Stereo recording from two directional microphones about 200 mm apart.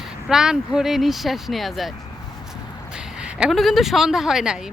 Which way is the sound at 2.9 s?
5° right (ahead or behind).